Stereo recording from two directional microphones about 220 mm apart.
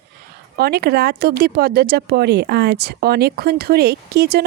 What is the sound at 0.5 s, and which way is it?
Speech, 45° right (ahead or behind).